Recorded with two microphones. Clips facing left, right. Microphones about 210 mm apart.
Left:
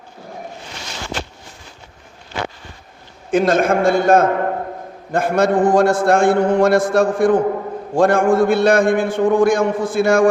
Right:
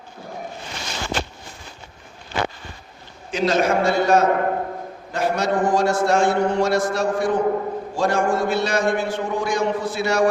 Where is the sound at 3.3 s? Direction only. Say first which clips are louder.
Left 4 dB; 50° left (ahead or behind).